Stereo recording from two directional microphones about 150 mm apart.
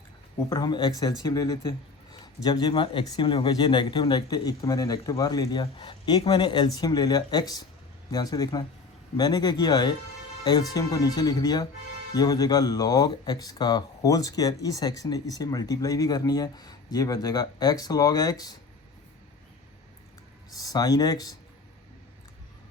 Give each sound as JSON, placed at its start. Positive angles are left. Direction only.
{"t": 0.5, "sound": "speech", "side_deg": 30}
{"t": 20.5, "sound": "speech", "side_deg": 25}